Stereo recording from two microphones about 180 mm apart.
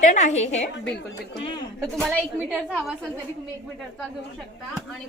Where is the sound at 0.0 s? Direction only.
45° left (ahead or behind).